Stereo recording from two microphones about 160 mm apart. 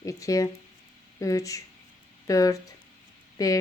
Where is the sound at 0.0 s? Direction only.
20° left (ahead or behind).